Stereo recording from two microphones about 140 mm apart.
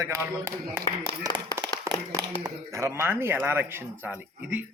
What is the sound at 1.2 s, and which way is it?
Speech, 30° right (ahead or behind).